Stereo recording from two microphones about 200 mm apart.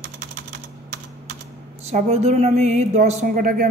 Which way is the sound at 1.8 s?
35° right (ahead or behind).